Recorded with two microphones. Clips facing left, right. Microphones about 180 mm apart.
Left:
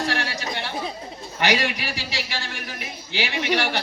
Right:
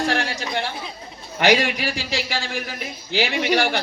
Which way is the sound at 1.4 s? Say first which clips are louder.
Right 5 dB; 50° right (ahead or behind).